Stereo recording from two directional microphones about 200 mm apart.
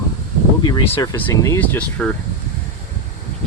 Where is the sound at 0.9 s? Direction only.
10° left (ahead or behind).